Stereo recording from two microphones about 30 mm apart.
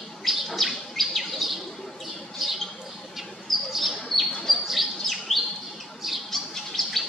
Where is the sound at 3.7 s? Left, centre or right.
Centre.